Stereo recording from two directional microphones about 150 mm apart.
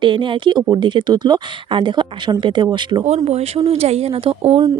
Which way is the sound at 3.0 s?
45° right (ahead or behind).